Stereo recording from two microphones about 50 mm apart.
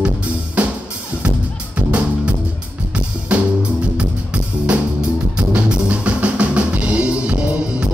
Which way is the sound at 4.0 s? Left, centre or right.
Right.